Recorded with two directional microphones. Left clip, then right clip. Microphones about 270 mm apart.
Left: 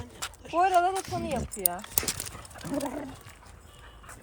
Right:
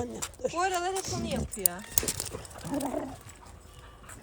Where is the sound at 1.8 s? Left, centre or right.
Centre.